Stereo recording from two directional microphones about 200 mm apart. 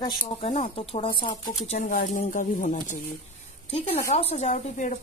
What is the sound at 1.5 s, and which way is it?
Speech, 35° left (ahead or behind).